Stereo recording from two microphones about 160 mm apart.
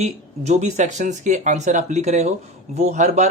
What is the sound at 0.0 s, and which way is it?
Speech, 45° right (ahead or behind).